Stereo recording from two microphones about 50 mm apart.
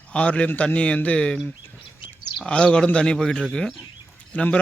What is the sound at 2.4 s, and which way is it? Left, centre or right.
A man's voice, left.